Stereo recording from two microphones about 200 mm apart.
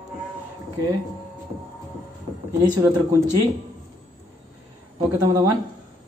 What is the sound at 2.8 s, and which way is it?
Speech, 15° right (ahead or behind).